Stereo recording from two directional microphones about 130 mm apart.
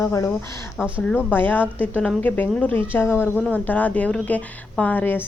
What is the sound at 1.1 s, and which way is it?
Speech, 15° left (ahead or behind).